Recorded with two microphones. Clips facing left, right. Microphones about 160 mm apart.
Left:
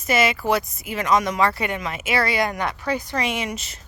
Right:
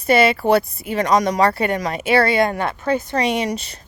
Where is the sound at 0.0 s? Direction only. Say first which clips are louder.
Right 6 dB; 30° right (ahead or behind).